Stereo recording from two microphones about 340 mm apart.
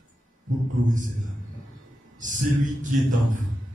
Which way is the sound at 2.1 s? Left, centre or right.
Right.